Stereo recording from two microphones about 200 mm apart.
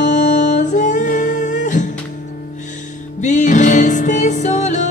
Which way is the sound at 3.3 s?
35° left (ahead or behind).